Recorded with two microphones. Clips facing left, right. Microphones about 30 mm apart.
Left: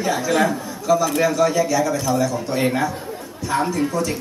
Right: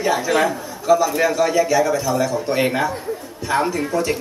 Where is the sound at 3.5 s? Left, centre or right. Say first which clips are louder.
Right 1 dB; right.